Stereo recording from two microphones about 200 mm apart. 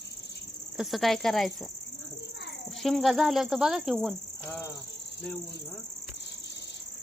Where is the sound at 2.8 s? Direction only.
Centre (ahead or behind).